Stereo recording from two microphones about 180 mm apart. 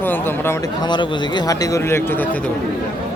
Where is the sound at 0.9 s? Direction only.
25° left (ahead or behind); by 2.4 s 10° left (ahead or behind).